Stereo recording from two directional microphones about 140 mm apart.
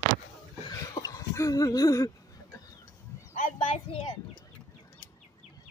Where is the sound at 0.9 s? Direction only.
25° left (ahead or behind).